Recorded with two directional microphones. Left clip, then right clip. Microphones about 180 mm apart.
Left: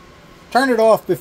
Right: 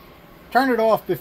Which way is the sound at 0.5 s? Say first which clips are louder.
Left 4 dB; 35° left (ahead or behind).